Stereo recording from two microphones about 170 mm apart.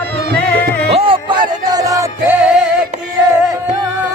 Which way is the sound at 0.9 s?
30° right (ahead or behind).